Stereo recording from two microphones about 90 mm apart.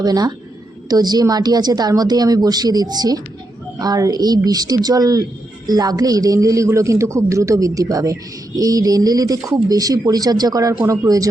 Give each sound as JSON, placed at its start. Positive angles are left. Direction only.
{"t": 0.0, "sound": "a woman's voice", "side_deg": -50}